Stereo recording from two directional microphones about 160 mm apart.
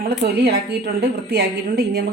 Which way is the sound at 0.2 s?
90° right.